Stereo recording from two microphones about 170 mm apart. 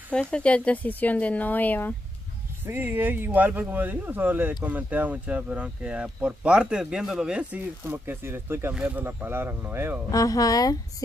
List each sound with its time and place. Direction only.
0.1 s speech: 5° left (ahead or behind)
2.6 s speech: 10° right (ahead or behind)
10.1 s speech: 20° left (ahead or behind)